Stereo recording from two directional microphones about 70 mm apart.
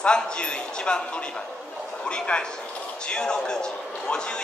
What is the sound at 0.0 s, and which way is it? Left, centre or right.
A man's voice, centre.